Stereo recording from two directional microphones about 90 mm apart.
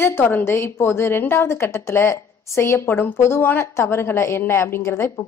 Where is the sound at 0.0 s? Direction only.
25° left (ahead or behind).